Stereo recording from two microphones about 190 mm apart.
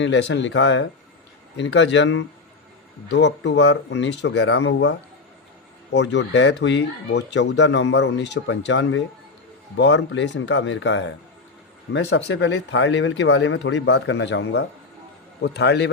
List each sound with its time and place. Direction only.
0.0 s speech: 70° left (ahead or behind)
3.1 s a man's voice: 65° left (ahead or behind)